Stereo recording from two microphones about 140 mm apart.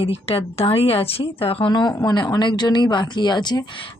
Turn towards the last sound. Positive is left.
turn(degrees=30)  # may be behind; listen again after turning